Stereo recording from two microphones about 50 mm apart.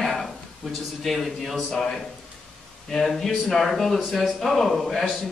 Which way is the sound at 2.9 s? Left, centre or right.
Centre.